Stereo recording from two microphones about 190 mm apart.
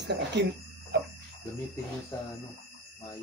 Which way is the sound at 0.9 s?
65° right (ahead or behind).